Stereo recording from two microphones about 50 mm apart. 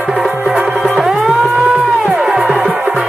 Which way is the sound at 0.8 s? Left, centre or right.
Centre.